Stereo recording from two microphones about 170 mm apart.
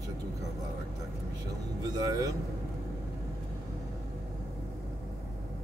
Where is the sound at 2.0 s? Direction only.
20° right (ahead or behind).